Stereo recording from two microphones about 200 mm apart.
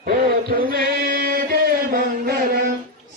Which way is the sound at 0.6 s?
50° right (ahead or behind).